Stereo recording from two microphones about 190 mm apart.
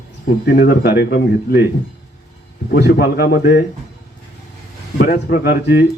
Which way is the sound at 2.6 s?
55° left (ahead or behind).